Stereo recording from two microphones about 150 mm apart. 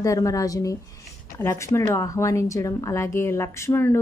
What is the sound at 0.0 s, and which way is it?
Speech, 20° left (ahead or behind).